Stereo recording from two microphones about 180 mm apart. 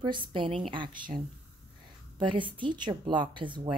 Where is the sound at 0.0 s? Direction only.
25° right (ahead or behind).